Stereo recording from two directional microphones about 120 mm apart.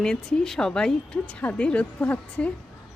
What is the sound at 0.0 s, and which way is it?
Speech, 5° left (ahead or behind).